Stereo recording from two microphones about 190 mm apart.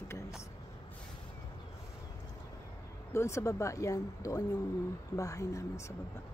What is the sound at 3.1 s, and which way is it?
Speech, 15° left (ahead or behind).